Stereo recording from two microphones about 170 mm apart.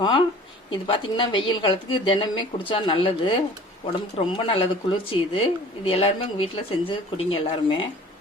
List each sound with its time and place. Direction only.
0.0 s speech: 30° left (ahead or behind)
4.4 s speech: 35° left (ahead or behind)